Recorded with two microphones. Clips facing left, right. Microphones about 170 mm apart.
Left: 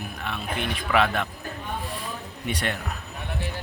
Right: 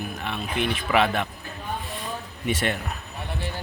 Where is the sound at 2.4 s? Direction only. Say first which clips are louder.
Right 3 dB; 5° right (ahead or behind).